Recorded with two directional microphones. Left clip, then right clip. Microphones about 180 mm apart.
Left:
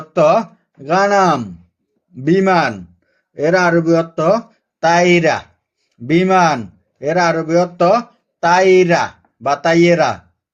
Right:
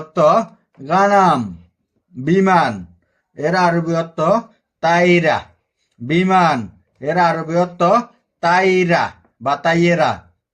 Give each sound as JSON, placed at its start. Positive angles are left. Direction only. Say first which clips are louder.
{"t": 0.9, "sound": "speech", "louder": "even", "side_deg": 35}